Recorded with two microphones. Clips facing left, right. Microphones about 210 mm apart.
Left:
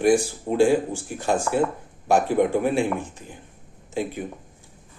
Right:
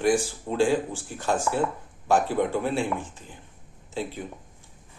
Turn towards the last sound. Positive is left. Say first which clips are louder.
# left 4 dB
turn(degrees=15)  # may be behind; listen again after turning